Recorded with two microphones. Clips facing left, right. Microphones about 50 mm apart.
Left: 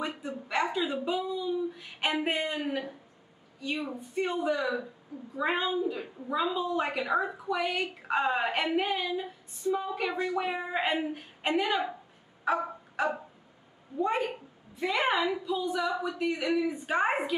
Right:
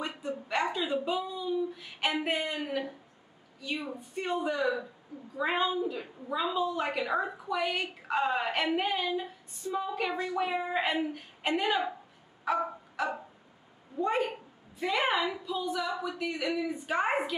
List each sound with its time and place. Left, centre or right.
0.0 s a sound: centre
1.8 s a sound: centre
2.2 s speech: centre
3.6 s a woman's voice: centre
8.6 s a woman's voice: centre
9.6 s a woman's voice: centre
10.1 s a woman's voice: centre
11.6 s a woman's voice: centre
12.4 s music: centre
14.0 s a woman's voice: centre